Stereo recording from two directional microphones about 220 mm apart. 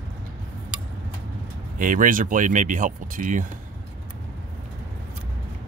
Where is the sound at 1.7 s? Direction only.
35° right (ahead or behind).